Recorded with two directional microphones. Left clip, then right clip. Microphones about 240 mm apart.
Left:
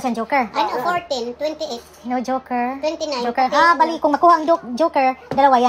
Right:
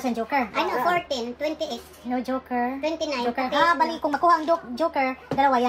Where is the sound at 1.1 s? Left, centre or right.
Centre.